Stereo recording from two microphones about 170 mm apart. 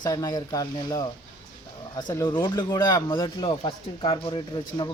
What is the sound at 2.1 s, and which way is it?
Speech, 25° left (ahead or behind).